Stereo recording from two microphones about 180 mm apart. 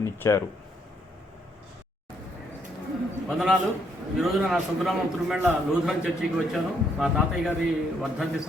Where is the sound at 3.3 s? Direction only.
5° right (ahead or behind).